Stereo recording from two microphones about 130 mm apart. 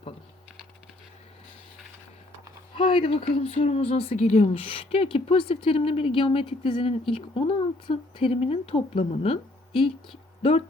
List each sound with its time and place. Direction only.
2.7 s speech: 40° left (ahead or behind)